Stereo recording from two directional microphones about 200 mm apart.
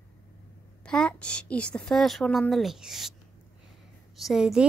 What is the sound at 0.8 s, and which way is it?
A woman's voice, 5° left (ahead or behind).